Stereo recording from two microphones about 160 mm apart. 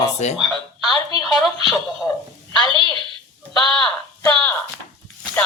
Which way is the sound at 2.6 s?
30° right (ahead or behind).